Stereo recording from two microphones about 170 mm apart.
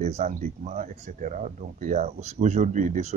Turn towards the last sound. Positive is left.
turn(degrees=-45)  # may be behind; listen again after turning